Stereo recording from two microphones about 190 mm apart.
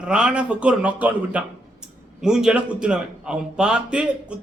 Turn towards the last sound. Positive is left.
turn(degrees=-5)  # may be behind; listen again after turning